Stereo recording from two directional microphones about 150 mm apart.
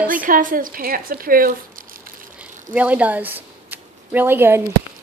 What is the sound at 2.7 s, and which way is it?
Speech, 10° right (ahead or behind).